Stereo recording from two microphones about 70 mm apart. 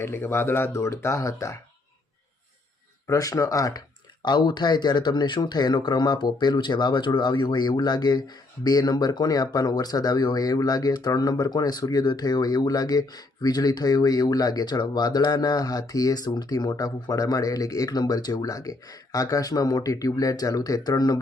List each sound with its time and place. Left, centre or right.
0.0 s speech: left
3.1 s speech: left
7.5 s speech: left